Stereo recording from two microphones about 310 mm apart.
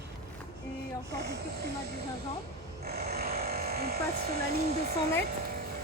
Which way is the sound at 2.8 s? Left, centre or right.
Right.